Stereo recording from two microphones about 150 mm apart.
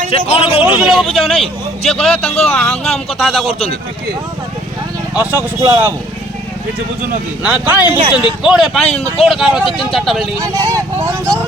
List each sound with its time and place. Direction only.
0.1 s a man's voice: 40° left (ahead or behind)
0.6 s speech: 5° right (ahead or behind)
5.1 s speech: 10° right (ahead or behind)
7.4 s speech: 10° right (ahead or behind)
10.4 s speech: 20° right (ahead or behind)